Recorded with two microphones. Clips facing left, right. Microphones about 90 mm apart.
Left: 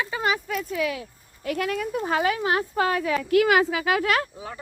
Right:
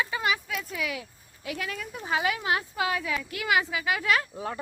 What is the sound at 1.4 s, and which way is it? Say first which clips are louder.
Speech: left 8 dB; 55° left (ahead or behind).